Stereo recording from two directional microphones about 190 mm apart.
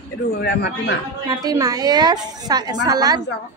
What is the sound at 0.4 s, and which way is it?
Speech, 65° left (ahead or behind).